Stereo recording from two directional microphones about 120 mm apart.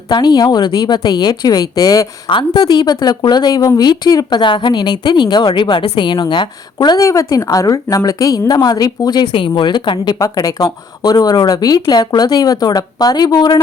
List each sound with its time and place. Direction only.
0.1 s a woman's voice: 35° left (ahead or behind)